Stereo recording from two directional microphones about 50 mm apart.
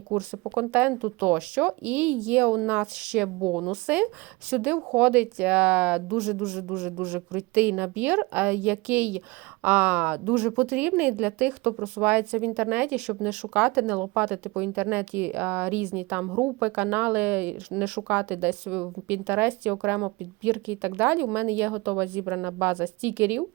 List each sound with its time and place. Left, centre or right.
0.1 s a woman's voice: right
3.0 s a woman's voice: centre
3.8 s a woman's voice: right
13.1 s speech: centre
14.8 s a woman's voice: right
19.0 s a woman's voice: right